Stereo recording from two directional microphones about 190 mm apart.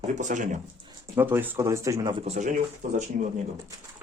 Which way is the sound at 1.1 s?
10° right (ahead or behind).